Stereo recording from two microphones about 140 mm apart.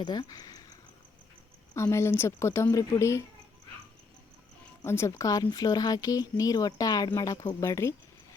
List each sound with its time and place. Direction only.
0.0 s speech: 30° left (ahead or behind)
1.7 s speech: 20° left (ahead or behind)
4.9 s speech: 20° left (ahead or behind)